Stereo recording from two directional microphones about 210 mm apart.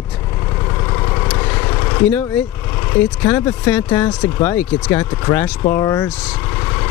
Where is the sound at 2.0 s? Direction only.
10° left (ahead or behind).